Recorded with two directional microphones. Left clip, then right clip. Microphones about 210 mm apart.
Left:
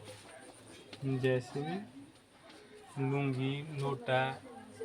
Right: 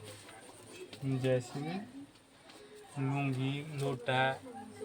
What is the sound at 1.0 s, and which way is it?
Speech, 10° right (ahead or behind).